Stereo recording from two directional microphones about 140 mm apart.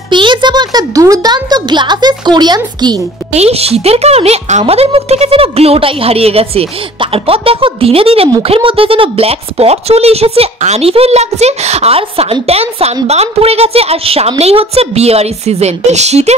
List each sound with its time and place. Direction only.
0.1 s a child's voice: 35° right (ahead or behind)
3.3 s a woman's voice: 45° right (ahead or behind)